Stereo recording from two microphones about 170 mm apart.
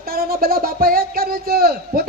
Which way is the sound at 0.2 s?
60° right (ahead or behind).